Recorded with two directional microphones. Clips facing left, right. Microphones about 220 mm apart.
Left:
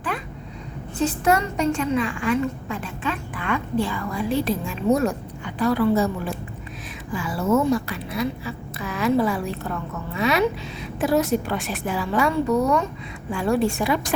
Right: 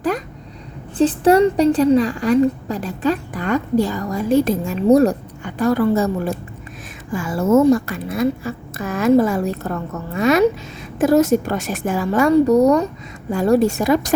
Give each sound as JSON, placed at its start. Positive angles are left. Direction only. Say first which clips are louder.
{"t": 0.9, "sound": "a woman's voice", "louder": "right 8 dB", "side_deg": -30}